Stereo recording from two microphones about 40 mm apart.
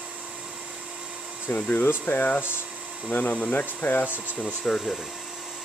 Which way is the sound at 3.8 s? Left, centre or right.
Left.